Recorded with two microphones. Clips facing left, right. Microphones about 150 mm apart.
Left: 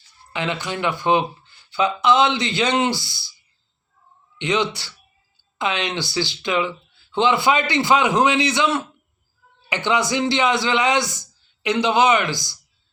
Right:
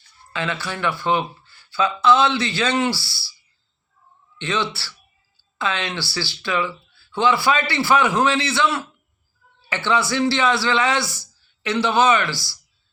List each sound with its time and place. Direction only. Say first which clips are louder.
0.3 s speech: left 2 dB; 20° left (ahead or behind)
4.4 s speech: left 3 dB; 15° left (ahead or behind)